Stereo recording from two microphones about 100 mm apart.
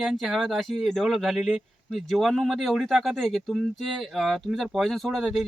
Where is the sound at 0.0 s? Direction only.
Centre (ahead or behind).